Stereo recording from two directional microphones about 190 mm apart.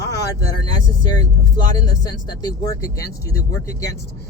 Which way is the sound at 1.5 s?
20° left (ahead or behind).